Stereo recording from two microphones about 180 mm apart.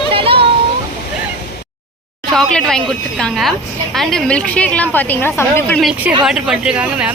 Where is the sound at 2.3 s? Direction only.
5° left (ahead or behind).